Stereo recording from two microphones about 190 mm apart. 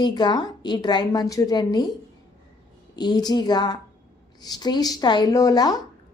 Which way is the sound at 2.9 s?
20° left (ahead or behind).